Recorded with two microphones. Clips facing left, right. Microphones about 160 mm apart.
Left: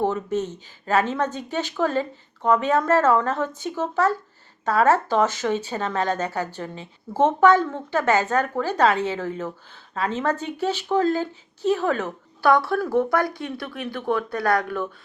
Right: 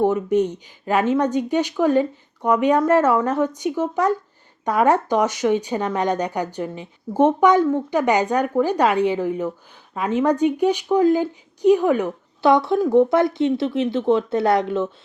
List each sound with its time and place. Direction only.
0.0 s a woman's voice: 15° right (ahead or behind)